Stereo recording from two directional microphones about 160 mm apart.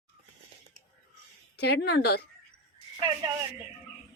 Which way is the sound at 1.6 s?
90° left.